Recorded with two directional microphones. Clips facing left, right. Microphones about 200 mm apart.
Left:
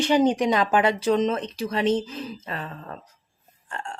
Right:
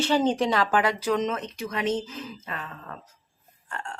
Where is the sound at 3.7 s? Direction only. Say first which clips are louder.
Left 2 dB; 25° left (ahead or behind).